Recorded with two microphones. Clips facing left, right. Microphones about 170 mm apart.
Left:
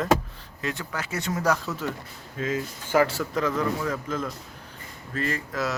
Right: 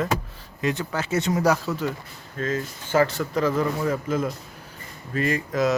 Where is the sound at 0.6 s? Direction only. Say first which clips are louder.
Right 6 dB; 20° right (ahead or behind).